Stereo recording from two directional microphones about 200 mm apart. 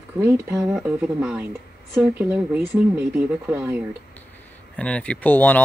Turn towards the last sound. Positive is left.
turn(degrees=10)  # may be behind; listen again after turning